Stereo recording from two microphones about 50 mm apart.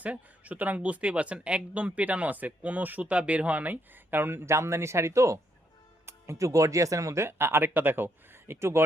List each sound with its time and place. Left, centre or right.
0.0 s speech: right
4.4 s speech: right